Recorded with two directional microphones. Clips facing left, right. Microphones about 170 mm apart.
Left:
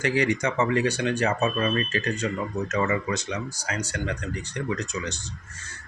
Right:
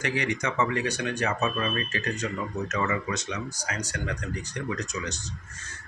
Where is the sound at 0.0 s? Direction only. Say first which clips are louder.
Left 5 dB; 30° left (ahead or behind).